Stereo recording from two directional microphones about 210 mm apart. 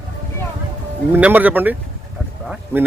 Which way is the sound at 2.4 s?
5° right (ahead or behind).